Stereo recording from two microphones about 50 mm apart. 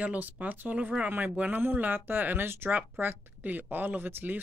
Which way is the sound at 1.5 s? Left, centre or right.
Right.